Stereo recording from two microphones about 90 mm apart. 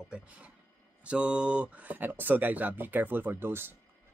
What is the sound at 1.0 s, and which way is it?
Speech, 10° right (ahead or behind).